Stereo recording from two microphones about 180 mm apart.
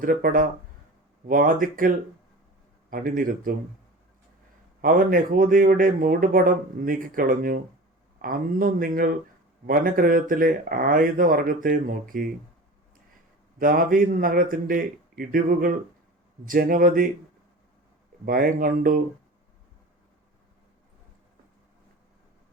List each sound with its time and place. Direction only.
0.0 s speech: 50° right (ahead or behind)
2.9 s speech: 50° right (ahead or behind)
4.8 s speech: 50° right (ahead or behind)
13.6 s speech: 50° right (ahead or behind)
18.3 s speech: 50° right (ahead or behind)